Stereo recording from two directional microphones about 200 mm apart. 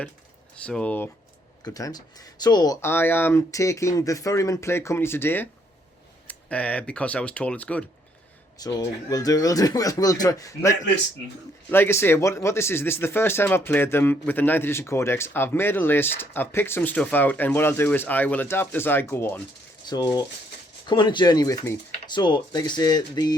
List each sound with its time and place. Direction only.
0.5 s speech: 5° left (ahead or behind)
1.6 s speech: 20° left (ahead or behind)
8.5 s speech: 20° left (ahead or behind)